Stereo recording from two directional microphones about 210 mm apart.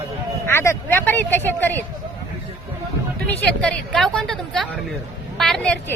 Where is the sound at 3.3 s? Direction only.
5° left (ahead or behind).